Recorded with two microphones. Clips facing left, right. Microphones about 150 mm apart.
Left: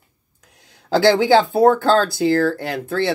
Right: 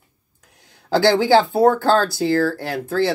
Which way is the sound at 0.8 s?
15° left (ahead or behind).